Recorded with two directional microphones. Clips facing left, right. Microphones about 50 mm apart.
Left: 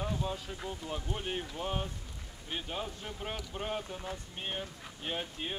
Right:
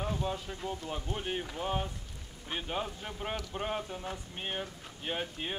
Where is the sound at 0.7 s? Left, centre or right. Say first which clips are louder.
Right 2 dB; right.